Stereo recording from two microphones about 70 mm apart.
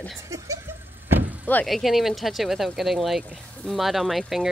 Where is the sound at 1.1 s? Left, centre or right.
Right.